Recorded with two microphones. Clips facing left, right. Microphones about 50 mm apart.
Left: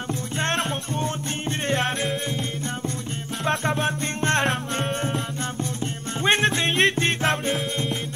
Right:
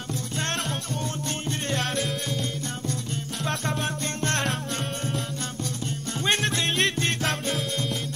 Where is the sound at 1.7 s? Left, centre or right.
Left.